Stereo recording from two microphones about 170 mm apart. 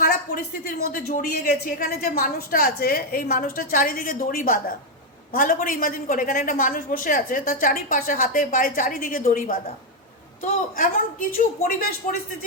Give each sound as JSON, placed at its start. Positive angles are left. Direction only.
{"t": 0.8, "sound": "a woman's voice", "side_deg": 60}